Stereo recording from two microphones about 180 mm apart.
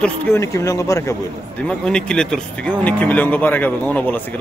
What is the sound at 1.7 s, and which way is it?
Speech, 5° left (ahead or behind).